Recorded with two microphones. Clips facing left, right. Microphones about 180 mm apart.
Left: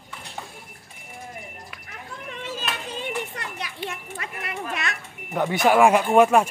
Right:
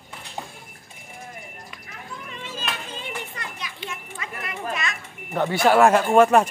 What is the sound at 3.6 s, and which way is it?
A child's voice, 60° left (ahead or behind).